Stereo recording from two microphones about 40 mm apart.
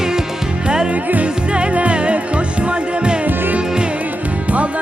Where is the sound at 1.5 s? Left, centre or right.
Right.